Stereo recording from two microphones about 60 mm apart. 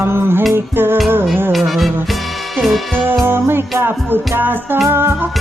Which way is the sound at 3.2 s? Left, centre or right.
Right.